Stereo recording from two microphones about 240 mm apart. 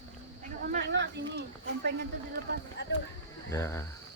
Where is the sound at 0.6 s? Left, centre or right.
Right.